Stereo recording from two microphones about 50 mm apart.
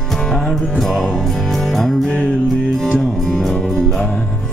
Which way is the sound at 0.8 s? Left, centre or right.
Centre.